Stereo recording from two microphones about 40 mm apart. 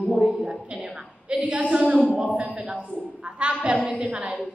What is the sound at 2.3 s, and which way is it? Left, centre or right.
Child singing, right.